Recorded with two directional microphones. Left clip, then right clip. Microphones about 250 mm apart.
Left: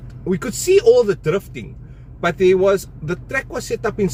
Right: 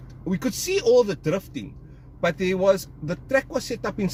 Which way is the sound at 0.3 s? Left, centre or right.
Centre.